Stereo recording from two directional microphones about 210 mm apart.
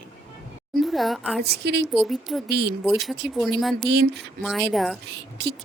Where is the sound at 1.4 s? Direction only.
50° right (ahead or behind).